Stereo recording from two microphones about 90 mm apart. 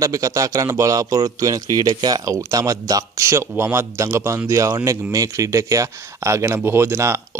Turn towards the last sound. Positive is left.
turn(degrees=-30)  # may be behind; listen again after turning